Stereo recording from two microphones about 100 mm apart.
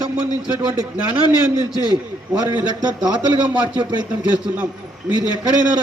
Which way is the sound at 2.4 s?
45° right (ahead or behind).